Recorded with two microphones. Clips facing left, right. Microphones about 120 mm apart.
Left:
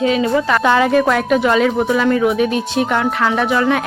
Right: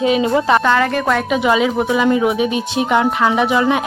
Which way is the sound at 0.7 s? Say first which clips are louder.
Left 3 dB; 15° left (ahead or behind).